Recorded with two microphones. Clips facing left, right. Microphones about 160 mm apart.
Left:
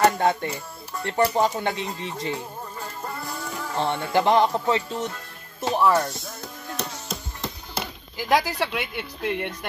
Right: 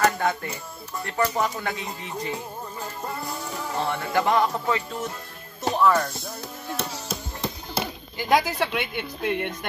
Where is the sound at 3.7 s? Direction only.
30° left (ahead or behind).